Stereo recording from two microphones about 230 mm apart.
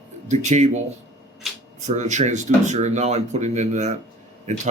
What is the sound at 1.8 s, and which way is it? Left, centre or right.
Speech, right.